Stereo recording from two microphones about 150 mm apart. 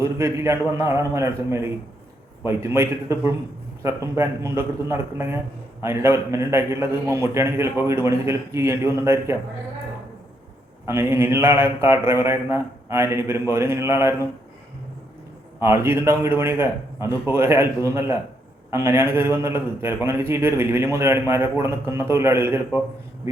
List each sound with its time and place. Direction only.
0.0 s a man's voice: 20° right (ahead or behind)
10.8 s a man's voice: 15° right (ahead or behind)
15.6 s a man's voice: 15° right (ahead or behind)